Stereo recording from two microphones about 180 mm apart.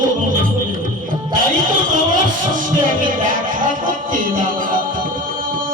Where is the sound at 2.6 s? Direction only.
45° right (ahead or behind).